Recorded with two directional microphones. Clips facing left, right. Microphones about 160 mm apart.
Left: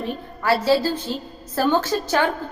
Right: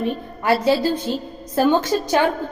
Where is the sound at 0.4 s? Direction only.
20° right (ahead or behind).